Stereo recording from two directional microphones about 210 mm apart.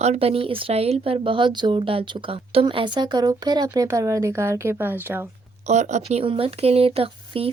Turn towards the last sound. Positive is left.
turn(degrees=-25)  # may be behind; listen again after turning